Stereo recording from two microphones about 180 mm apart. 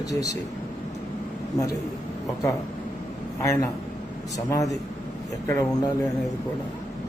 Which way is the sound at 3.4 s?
15° left (ahead or behind).